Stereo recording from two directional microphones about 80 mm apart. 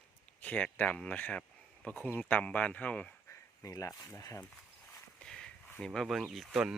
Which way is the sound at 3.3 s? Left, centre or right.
Left.